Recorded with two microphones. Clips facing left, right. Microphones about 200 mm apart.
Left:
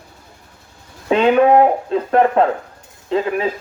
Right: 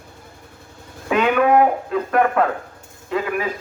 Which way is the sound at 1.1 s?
30° left (ahead or behind).